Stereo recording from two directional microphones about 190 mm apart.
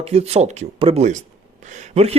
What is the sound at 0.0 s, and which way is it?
Speech, 35° right (ahead or behind).